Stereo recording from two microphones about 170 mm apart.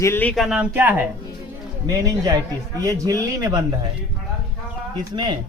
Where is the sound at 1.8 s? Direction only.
20° right (ahead or behind).